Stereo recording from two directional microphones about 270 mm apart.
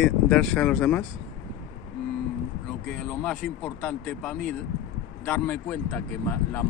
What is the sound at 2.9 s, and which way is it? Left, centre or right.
Speech, centre.